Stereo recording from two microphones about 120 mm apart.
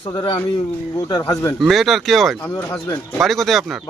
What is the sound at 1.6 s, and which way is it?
Speech, centre (ahead or behind).